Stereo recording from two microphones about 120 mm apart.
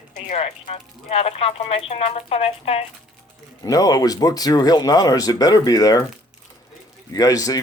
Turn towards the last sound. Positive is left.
turn(degrees=30)  # may be behind; listen again after turning